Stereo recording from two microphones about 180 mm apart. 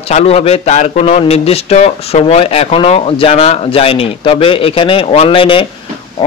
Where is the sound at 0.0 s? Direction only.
35° left (ahead or behind).